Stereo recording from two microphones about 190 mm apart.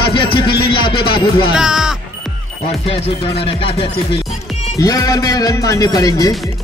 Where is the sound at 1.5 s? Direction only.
5° right (ahead or behind).